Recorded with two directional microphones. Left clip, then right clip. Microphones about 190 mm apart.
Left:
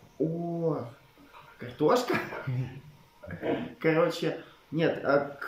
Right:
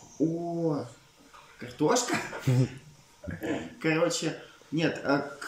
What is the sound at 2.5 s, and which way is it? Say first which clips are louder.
Speech: right 10 dB; 50° right (ahead or behind).